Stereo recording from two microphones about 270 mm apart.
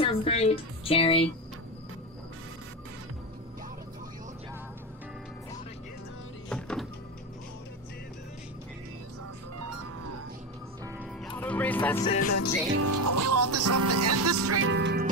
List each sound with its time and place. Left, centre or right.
0.0 s speech: left
6.5 s music: centre
11.3 s music: centre
12.2 s music: left
12.8 s speech: right